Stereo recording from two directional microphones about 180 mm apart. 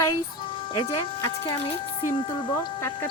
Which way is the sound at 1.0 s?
30° left (ahead or behind).